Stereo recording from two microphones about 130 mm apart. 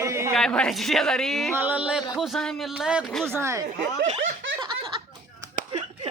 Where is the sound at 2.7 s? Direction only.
10° right (ahead or behind).